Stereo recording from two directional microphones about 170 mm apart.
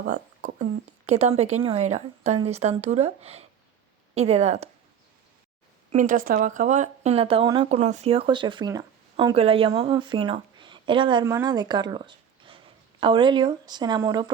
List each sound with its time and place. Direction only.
0.1 s a woman's voice: 45° right (ahead or behind)
5.9 s speech: 50° right (ahead or behind); by 7.7 s 25° right (ahead or behind)
7.7 s speech: 40° right (ahead or behind); by 14.3 s 25° right (ahead or behind)